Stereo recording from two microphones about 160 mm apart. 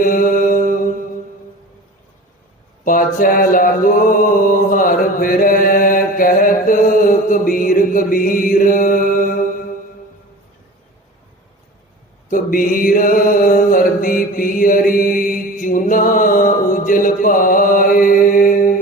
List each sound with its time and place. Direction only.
0.0 s mantra: 55° left (ahead or behind)
2.8 s mantra: 60° left (ahead or behind)
12.3 s mantra: 60° left (ahead or behind)